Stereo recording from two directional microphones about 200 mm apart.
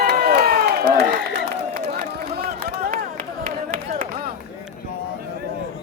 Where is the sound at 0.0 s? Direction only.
50° right (ahead or behind).